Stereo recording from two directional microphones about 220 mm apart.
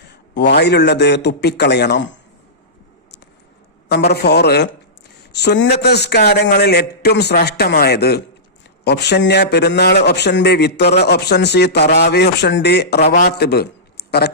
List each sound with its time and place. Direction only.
0.3 s a man's voice: 50° left (ahead or behind)
3.8 s a man's voice: 50° left (ahead or behind)